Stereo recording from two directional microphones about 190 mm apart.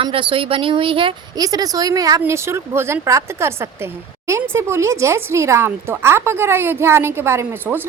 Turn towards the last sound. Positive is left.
turn(degrees=-10)  # may be behind; listen again after turning